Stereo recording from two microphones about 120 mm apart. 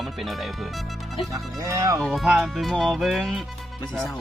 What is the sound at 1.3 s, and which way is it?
Speech, 30° right (ahead or behind).